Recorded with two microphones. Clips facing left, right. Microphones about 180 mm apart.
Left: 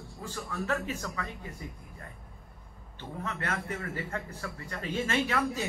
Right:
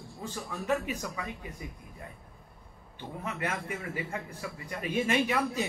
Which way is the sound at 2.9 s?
10° right (ahead or behind).